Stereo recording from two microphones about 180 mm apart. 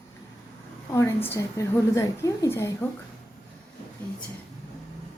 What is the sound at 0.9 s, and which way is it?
A woman's voice, 15° left (ahead or behind).